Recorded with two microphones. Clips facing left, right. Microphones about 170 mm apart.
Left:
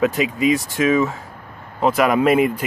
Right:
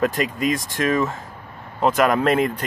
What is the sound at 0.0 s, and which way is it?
Speech, centre (ahead or behind).